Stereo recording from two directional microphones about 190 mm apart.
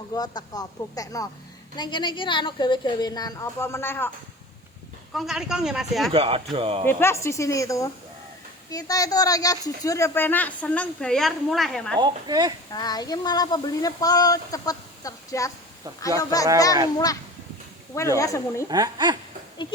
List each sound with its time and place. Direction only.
0.1 s speech: 20° left (ahead or behind)
5.1 s speech: centre (ahead or behind)
6.1 s speech: 30° right (ahead or behind)
6.8 s speech: 15° left (ahead or behind)
11.9 s speech: 20° right (ahead or behind)
12.7 s speech: 20° left (ahead or behind)
18.2 s speech: 15° left (ahead or behind)
18.7 s speech: 20° right (ahead or behind)